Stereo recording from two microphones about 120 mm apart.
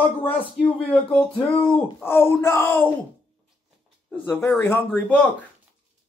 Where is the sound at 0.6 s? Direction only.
5° right (ahead or behind).